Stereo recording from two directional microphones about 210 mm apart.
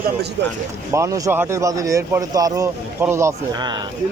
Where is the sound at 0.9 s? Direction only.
15° right (ahead or behind).